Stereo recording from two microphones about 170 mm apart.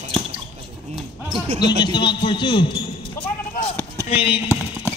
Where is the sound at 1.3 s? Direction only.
40° right (ahead or behind).